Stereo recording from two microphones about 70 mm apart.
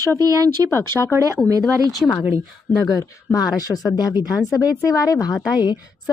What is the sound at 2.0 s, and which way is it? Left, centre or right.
Speech, centre.